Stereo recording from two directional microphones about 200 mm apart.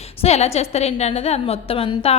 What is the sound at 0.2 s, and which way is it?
A woman's voice, 30° left (ahead or behind).